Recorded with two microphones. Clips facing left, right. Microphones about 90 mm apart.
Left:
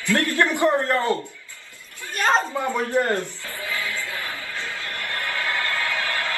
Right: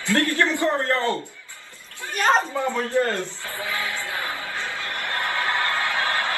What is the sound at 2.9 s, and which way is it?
Speech, 20° left (ahead or behind).